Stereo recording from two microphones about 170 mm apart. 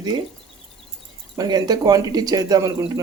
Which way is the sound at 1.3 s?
25° right (ahead or behind).